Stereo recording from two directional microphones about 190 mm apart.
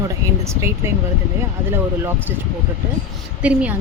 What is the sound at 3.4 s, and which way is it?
Speech, 5° right (ahead or behind).